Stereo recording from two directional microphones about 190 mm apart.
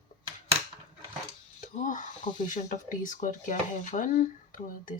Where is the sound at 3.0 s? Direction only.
40° left (ahead or behind).